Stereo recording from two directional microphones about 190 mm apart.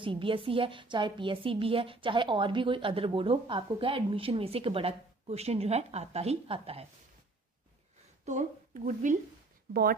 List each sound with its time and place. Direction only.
0.0 s a woman's voice: 25° right (ahead or behind)
8.3 s a woman's voice: 40° right (ahead or behind)